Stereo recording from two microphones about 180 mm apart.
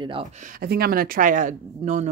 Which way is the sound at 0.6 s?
55° right (ahead or behind).